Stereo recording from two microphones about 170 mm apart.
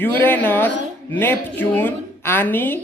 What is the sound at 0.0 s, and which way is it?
Speech, 10° left (ahead or behind).